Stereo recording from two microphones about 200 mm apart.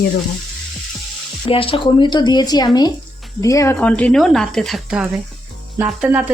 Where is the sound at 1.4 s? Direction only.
25° left (ahead or behind).